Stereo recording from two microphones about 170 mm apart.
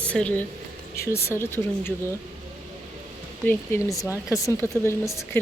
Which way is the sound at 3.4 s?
15° left (ahead or behind).